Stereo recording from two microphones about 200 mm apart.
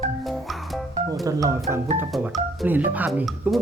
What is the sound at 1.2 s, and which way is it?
Speech, 15° right (ahead or behind).